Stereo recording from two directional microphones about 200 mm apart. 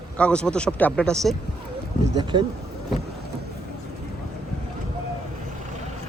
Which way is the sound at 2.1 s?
25° right (ahead or behind).